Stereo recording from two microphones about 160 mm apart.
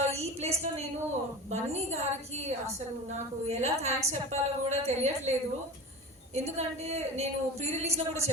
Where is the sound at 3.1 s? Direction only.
40° right (ahead or behind).